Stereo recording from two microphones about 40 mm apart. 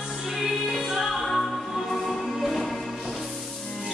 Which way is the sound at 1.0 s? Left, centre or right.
Centre.